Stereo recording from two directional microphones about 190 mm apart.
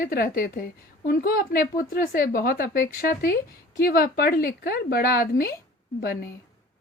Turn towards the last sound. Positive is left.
turn(degrees=55)  # may be behind; listen again after turning